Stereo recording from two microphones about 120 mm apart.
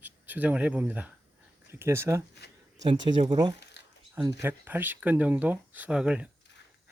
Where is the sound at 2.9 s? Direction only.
55° right (ahead or behind).